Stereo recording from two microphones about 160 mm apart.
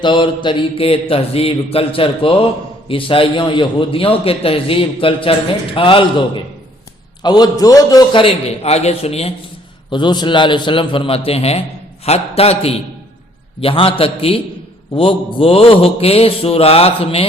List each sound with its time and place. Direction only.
0.0 s a man's voice: 30° left (ahead or behind)
7.2 s a man's voice: 25° left (ahead or behind)
9.9 s a man's voice: 30° left (ahead or behind)